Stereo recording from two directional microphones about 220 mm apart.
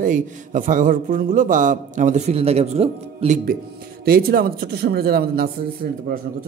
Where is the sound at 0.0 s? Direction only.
35° right (ahead or behind).